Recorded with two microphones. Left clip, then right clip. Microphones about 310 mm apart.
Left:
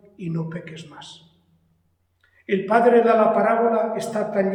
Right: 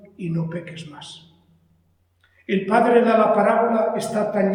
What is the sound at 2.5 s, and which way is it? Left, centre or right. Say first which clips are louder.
A man's voice: left 1 dB; centre.